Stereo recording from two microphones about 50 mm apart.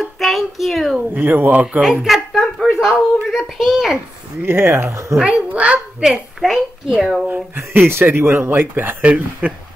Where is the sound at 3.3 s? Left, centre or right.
Centre.